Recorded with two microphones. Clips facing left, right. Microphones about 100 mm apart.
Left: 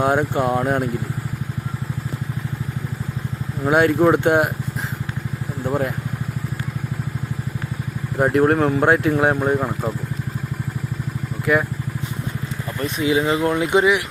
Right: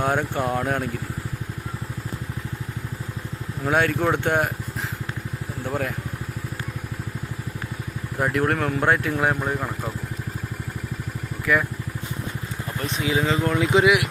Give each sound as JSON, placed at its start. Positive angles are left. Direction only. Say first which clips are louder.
{"t": 0.0, "sound": "speech", "louder": "left 5 dB", "side_deg": 15}
{"t": 3.7, "sound": "speech", "louder": "left 6 dB", "side_deg": 10}
{"t": 5.6, "sound": "speech", "louder": "left 5 dB", "side_deg": 15}
{"t": 8.2, "sound": "speech", "louder": "left 6 dB", "side_deg": 30}
{"t": 12.8, "sound": "speech", "louder": "left 5 dB", "side_deg": 5}
{"t": 13.2, "sound": "speech", "louder": "left 3 dB", "side_deg": 15}
{"t": 13.7, "sound": "speech", "louder": "even", "side_deg": -5}